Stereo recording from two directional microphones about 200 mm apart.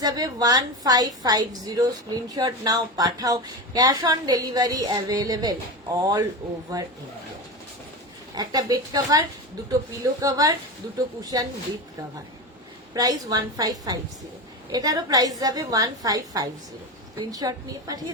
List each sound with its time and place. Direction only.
0.0 s a woman's voice: 20° right (ahead or behind)
8.4 s a woman's voice: 20° right (ahead or behind)
12.9 s a woman's voice: 20° right (ahead or behind)